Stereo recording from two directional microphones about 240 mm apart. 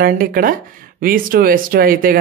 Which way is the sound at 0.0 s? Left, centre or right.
Right.